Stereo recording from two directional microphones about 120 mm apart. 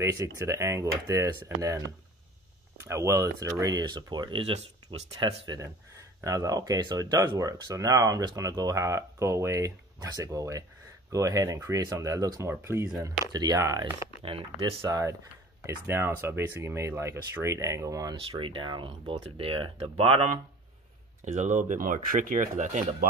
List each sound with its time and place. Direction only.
0.0 s speech: 25° right (ahead or behind); by 5.4 s 60° right (ahead or behind)
6.2 s speech: 30° right (ahead or behind)
13.2 s speech: 35° right (ahead or behind)
14.2 s speech: 50° right (ahead or behind)
14.9 s speech: 30° right (ahead or behind)
18.4 s speech: 45° right (ahead or behind)
21.2 s speech: 90° right